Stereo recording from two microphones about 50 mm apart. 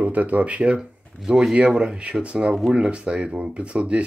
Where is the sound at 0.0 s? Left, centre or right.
Right.